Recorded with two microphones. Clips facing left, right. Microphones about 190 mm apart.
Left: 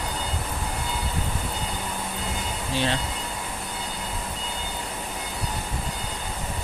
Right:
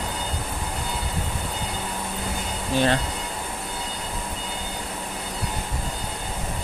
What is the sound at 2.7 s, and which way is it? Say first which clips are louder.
Speech: right 5 dB; 50° right (ahead or behind).